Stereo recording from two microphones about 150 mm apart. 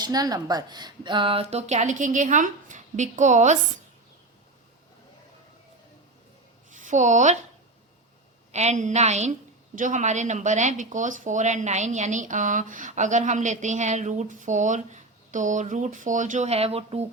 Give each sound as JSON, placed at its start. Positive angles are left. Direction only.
{"t": 0.0, "sound": "speech", "side_deg": -25}
{"t": 6.7, "sound": "a woman's voice", "side_deg": -55}
{"t": 8.5, "sound": "speech", "side_deg": -50}